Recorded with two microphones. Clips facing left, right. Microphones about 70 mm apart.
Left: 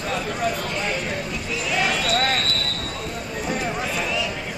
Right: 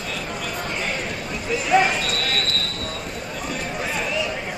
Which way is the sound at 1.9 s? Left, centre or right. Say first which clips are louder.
Left 4 dB; left.